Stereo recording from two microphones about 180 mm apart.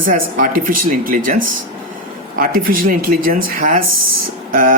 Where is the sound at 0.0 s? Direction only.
50° right (ahead or behind).